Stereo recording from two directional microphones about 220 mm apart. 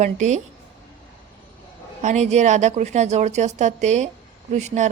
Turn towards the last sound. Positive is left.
turn(degrees=-30)  # may be behind; listen again after turning